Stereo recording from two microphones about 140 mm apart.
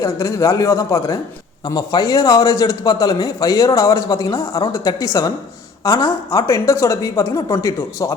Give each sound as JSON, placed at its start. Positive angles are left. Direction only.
{"t": 0.0, "sound": "a man's voice", "side_deg": 20}